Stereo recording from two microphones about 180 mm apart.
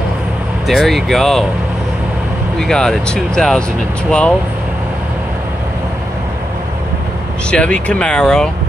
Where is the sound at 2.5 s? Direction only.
5° left (ahead or behind).